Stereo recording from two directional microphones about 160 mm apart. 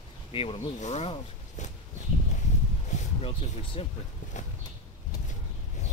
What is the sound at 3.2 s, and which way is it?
Speech, 35° left (ahead or behind).